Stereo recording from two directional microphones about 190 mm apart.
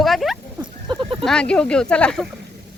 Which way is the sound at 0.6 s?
25° right (ahead or behind).